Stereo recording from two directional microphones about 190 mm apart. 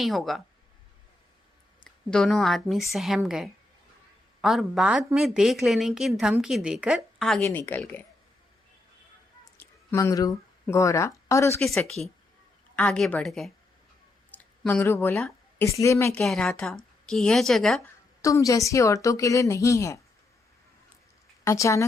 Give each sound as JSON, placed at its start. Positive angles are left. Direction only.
{"t": 0.0, "sound": "a woman's voice", "side_deg": 0}
{"t": 1.8, "sound": "a woman's voice", "side_deg": 5}
{"t": 7.4, "sound": "speech", "side_deg": 10}
{"t": 9.6, "sound": "speech", "side_deg": 15}
{"t": 11.6, "sound": "a woman's voice", "side_deg": 0}
{"t": 16.2, "sound": "a woman's voice", "side_deg": 0}
{"t": 18.2, "sound": "speech", "side_deg": 15}
{"t": 21.4, "sound": "speech", "side_deg": 15}